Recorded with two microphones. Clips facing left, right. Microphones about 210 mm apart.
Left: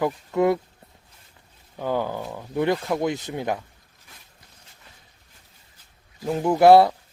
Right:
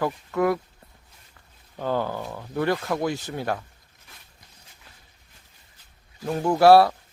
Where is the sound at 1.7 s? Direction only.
15° left (ahead or behind).